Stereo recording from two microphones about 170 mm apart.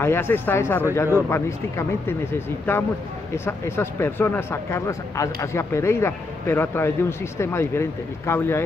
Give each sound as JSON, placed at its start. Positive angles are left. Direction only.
{"t": 0.0, "sound": "speech", "side_deg": 15}